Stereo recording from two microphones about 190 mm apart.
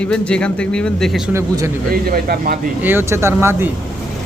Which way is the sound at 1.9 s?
50° right (ahead or behind).